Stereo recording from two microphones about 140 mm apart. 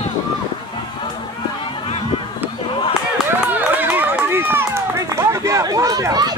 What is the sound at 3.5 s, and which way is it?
Run, 10° right (ahead or behind).